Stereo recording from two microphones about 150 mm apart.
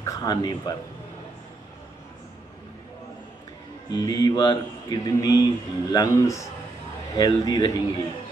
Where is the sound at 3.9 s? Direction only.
25° left (ahead or behind).